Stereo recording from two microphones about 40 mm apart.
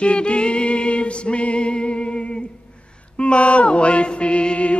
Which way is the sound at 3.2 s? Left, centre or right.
Left.